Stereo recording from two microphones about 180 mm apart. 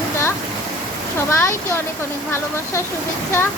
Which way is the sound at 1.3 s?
15° left (ahead or behind).